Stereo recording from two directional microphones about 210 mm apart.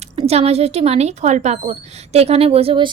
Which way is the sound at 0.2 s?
30° right (ahead or behind).